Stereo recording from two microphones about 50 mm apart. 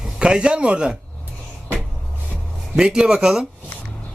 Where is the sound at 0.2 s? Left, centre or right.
Centre.